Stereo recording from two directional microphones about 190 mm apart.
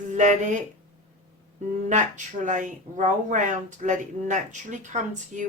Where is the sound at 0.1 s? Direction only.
40° right (ahead or behind).